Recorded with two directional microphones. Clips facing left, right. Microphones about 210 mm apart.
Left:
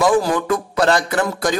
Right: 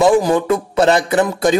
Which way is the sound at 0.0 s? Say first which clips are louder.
Right 4 dB; 25° right (ahead or behind).